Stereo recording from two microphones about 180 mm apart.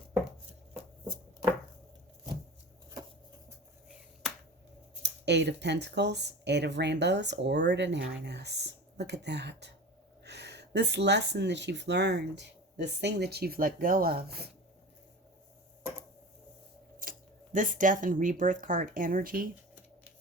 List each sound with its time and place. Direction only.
5.0 s speech: 70° right (ahead or behind)
17.0 s speech: 50° right (ahead or behind)